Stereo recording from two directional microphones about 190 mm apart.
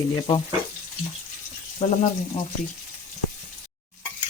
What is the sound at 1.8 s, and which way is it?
Speech, 30° left (ahead or behind).